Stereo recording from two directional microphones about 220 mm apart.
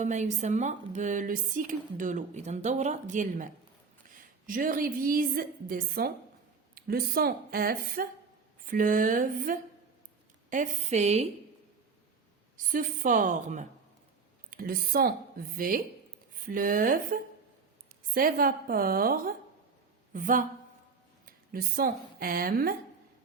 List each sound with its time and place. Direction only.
0.0 s speech: 35° right (ahead or behind)
12.5 s speech: 35° right (ahead or behind)